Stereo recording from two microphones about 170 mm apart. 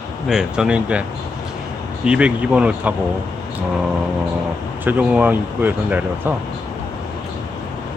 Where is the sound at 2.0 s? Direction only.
5° right (ahead or behind).